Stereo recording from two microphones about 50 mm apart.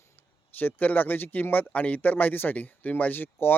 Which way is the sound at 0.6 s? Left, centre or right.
Left.